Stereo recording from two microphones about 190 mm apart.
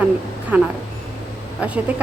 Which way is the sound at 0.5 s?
10° right (ahead or behind).